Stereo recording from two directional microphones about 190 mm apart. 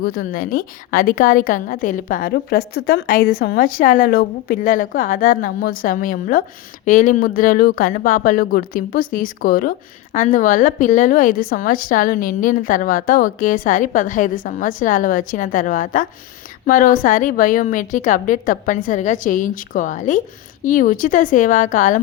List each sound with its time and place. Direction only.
0.0 s speech: 50° left (ahead or behind)